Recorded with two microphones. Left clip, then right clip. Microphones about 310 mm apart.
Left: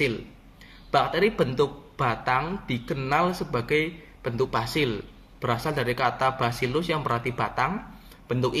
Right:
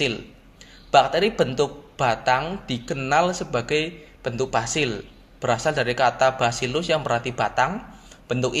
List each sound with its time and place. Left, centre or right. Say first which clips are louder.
0.9 s a man's voice: right 5 dB; centre